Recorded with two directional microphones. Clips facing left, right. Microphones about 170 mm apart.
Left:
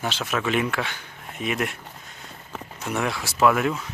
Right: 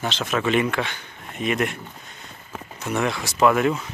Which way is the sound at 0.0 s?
5° left (ahead or behind).